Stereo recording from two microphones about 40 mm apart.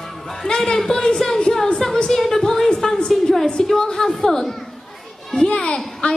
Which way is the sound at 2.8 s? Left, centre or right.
Centre.